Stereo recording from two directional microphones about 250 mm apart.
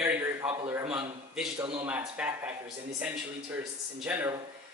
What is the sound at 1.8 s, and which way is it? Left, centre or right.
Speech, centre.